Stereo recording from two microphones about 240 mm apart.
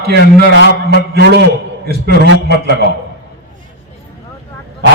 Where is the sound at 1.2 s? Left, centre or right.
Right.